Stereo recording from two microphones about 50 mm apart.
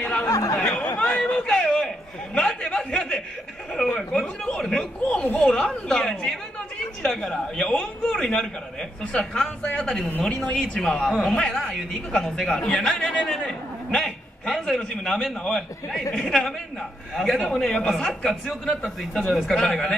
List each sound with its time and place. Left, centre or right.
0.0 s speech: left
0.9 s chatter: left
2.3 s chuckle: left
4.5 s a man's voice: centre
7.7 s a man's voice: left
10.6 s a man's voice: centre